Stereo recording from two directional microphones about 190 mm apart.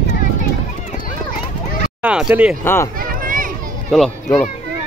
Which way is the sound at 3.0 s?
45° right (ahead or behind).